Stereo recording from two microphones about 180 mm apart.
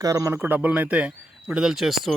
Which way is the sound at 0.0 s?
20° right (ahead or behind).